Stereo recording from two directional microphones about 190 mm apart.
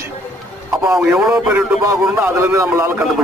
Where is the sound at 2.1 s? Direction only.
15° right (ahead or behind).